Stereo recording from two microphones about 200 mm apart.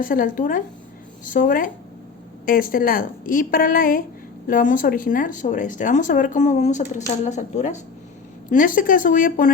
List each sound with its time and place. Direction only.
0.0 s a woman's voice: 45° left (ahead or behind)